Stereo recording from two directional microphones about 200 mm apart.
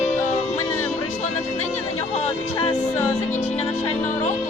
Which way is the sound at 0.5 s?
10° left (ahead or behind).